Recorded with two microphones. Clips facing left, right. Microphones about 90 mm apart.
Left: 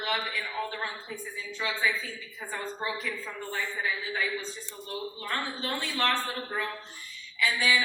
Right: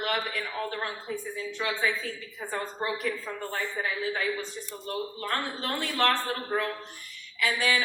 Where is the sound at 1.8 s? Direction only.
55° right (ahead or behind).